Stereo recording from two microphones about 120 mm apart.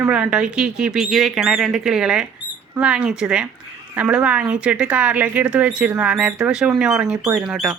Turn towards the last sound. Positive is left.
turn(degrees=-5)  # may be behind; listen again after turning